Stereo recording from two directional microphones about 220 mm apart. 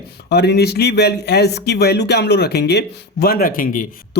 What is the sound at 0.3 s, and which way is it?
Speech, 50° left (ahead or behind).